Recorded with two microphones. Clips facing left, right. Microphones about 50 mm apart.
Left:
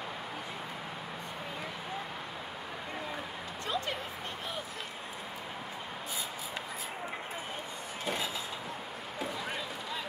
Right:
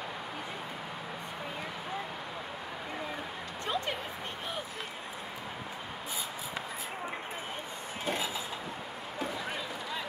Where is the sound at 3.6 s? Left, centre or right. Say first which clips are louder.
Right 1 dB; right.